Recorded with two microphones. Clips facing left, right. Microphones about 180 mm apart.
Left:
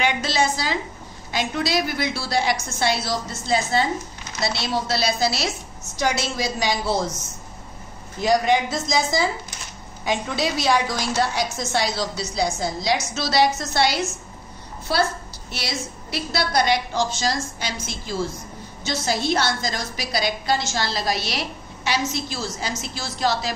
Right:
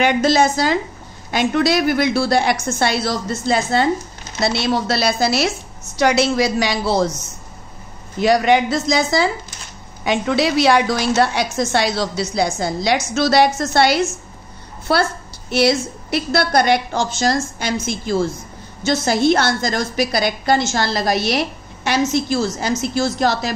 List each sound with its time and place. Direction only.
0.0 s a woman's voice: 50° right (ahead or behind)
5.9 s a woman's voice: 70° right (ahead or behind)
8.2 s a woman's voice: 70° right (ahead or behind)